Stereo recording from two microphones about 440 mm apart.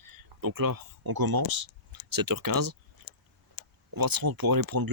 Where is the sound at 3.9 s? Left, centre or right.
Right.